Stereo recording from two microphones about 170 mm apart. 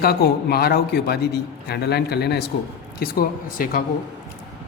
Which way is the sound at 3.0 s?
60° left (ahead or behind).